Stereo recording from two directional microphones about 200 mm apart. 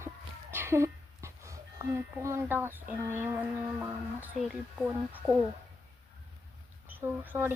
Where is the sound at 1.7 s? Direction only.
15° right (ahead or behind).